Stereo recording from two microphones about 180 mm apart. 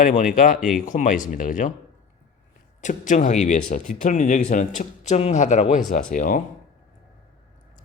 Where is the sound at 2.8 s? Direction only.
45° left (ahead or behind).